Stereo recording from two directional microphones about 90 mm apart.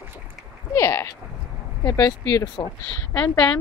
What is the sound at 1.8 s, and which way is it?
Speech, 45° left (ahead or behind).